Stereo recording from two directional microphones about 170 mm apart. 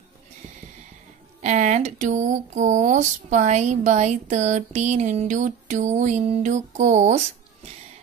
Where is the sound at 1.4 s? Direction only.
45° right (ahead or behind).